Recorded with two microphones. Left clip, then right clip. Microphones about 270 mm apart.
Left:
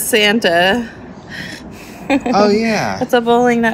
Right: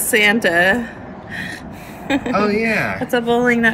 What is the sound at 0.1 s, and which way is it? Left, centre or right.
Speech, left.